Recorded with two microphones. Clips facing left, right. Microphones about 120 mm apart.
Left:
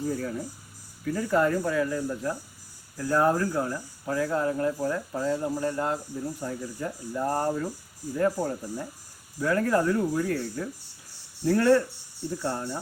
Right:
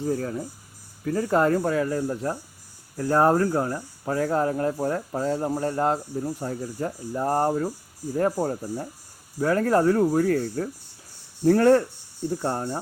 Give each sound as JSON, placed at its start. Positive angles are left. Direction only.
{"t": 0.1, "sound": "speech", "side_deg": -45}